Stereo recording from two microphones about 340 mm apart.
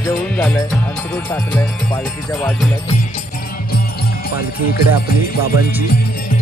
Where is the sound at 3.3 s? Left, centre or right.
Left.